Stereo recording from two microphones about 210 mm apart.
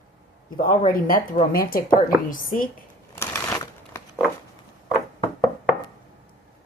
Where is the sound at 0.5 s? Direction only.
40° left (ahead or behind).